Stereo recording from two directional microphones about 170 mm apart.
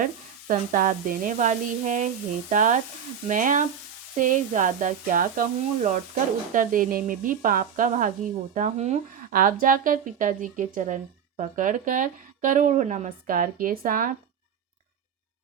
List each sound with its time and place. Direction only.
0.0 s speech: 50° right (ahead or behind)